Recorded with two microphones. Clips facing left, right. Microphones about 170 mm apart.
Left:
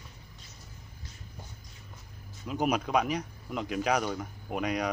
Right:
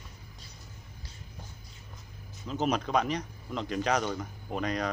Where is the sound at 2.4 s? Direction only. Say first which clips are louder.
Left 1 dB; 10° left (ahead or behind).